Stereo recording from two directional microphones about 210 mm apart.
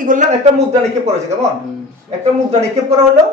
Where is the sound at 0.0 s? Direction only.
40° right (ahead or behind).